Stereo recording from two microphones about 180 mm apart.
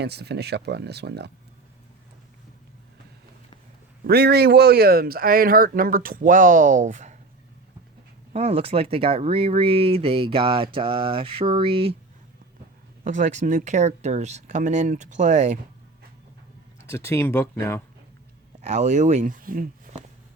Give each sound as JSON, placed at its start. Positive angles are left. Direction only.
{"t": 0.0, "sound": "speech", "side_deg": -65}
{"t": 4.0, "sound": "speech", "side_deg": -65}
{"t": 8.3, "sound": "speech", "side_deg": -35}
{"t": 13.1, "sound": "speech", "side_deg": -45}
{"t": 16.8, "sound": "speech", "side_deg": 15}
{"t": 18.6, "sound": "speech", "side_deg": -40}